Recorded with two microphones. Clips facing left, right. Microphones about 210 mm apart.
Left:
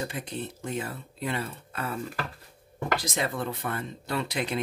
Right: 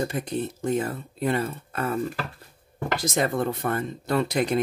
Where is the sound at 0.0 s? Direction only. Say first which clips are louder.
Right 6 dB; 45° right (ahead or behind).